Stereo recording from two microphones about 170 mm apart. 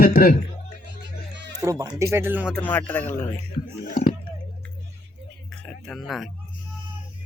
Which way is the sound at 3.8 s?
55° left (ahead or behind).